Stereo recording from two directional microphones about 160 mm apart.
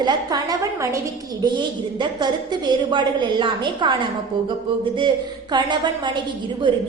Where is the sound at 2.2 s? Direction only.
30° right (ahead or behind).